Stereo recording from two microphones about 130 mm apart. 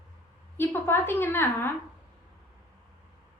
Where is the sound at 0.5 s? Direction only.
15° left (ahead or behind).